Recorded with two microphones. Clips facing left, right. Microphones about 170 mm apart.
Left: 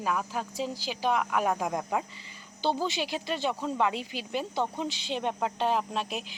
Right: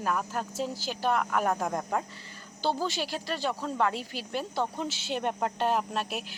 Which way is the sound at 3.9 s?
40° right (ahead or behind).